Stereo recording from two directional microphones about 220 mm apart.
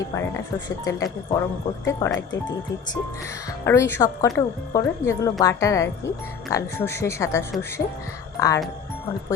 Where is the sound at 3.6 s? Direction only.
10° left (ahead or behind).